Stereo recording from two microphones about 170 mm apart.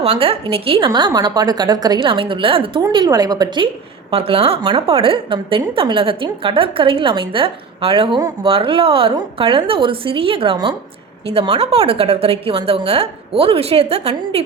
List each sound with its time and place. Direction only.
0.0 s a woman's voice: 35° right (ahead or behind)